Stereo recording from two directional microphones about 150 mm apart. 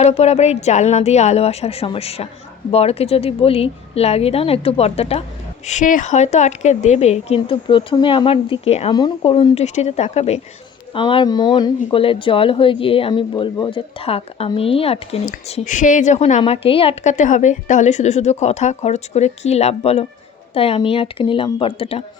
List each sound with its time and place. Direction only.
0.0 s a woman's voice: 45° left (ahead or behind)
5.6 s a woman's voice: 55° left (ahead or behind)
8.9 s a woman's voice: 30° left (ahead or behind); by 10.4 s 45° left (ahead or behind)
10.9 s a woman's voice: 35° left (ahead or behind)
15.6 s a woman's voice: 60° left (ahead or behind)
16.4 s a woman's voice: 40° left (ahead or behind)